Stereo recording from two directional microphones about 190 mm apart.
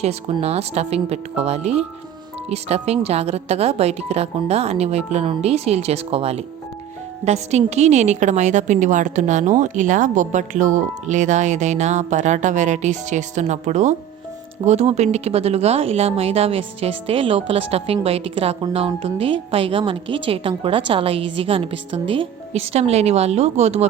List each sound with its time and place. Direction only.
0.0 s a woman's voice: 35° right (ahead or behind)